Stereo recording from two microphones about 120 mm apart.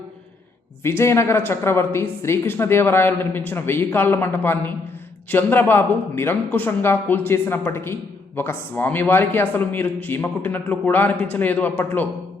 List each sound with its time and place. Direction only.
0.8 s a man's voice: 20° left (ahead or behind)